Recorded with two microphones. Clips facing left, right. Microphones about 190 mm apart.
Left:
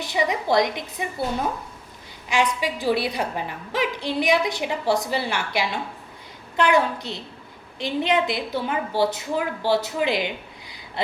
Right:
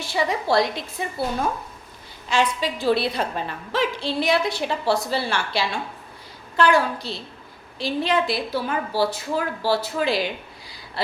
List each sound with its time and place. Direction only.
0.0 s a woman's voice: 20° left (ahead or behind)